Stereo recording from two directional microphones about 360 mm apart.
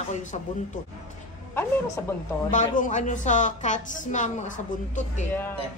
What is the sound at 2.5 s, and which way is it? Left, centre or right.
A woman's voice, left.